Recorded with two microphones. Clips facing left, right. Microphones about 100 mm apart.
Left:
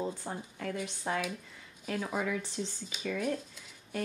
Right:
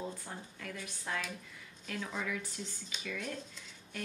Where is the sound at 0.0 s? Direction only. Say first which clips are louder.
Left 6 dB; 30° left (ahead or behind).